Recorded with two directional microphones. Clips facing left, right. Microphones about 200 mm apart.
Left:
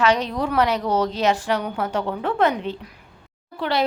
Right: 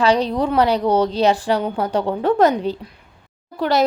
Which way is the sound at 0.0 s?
35° right (ahead or behind).